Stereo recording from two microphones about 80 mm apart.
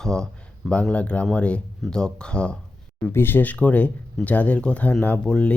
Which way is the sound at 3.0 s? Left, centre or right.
Left.